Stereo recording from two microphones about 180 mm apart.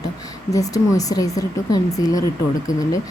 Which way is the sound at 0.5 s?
20° left (ahead or behind).